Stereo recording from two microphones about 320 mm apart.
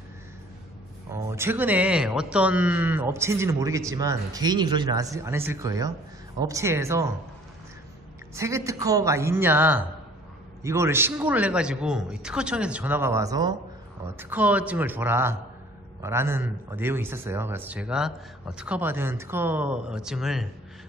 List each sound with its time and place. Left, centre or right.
1.1 s a man's voice: centre
8.4 s a man's voice: centre